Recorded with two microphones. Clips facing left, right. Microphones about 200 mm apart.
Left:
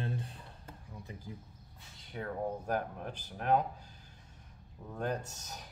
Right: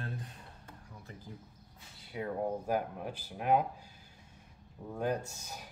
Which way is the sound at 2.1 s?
10° right (ahead or behind).